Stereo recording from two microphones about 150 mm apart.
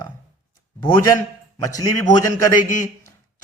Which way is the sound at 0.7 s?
30° left (ahead or behind).